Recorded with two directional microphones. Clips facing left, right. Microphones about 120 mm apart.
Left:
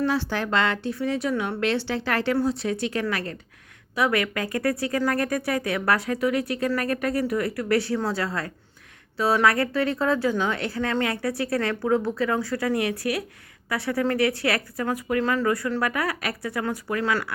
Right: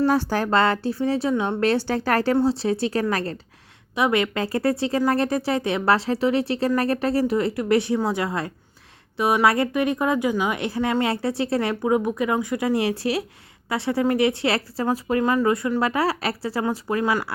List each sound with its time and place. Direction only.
0.1 s a woman's voice: 40° right (ahead or behind); by 1.5 s 25° right (ahead or behind)
1.6 s a woman's voice: 40° right (ahead or behind)
2.3 s a woman's voice: 30° right (ahead or behind)
3.9 s speech: 20° right (ahead or behind)